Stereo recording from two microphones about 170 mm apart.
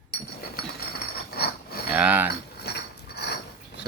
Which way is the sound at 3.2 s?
75° left (ahead or behind).